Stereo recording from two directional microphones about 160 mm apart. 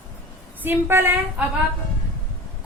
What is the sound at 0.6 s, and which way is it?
Speech, 15° right (ahead or behind).